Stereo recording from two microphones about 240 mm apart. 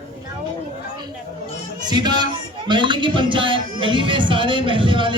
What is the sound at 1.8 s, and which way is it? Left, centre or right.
Music, centre.